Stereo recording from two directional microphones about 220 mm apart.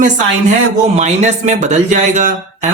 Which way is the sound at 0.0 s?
35° right (ahead or behind).